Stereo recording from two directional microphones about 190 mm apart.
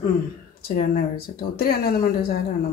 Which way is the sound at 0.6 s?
55° left (ahead or behind).